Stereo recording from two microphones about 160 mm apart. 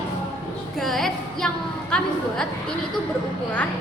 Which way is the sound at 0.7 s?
Centre (ahead or behind).